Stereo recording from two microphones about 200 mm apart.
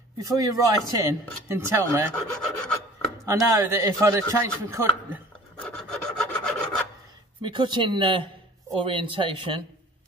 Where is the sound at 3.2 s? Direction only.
15° right (ahead or behind).